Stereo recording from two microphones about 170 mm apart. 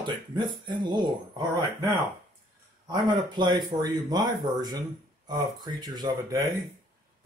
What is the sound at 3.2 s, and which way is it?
Speech, 25° right (ahead or behind).